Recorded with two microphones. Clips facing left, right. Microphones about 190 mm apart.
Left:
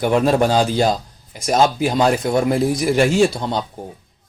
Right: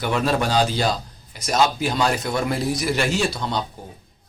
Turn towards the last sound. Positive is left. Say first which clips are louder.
# left 3 dB
turn(degrees=50)  # may be behind; listen again after turning